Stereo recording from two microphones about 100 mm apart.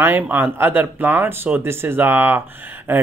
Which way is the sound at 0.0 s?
20° right (ahead or behind).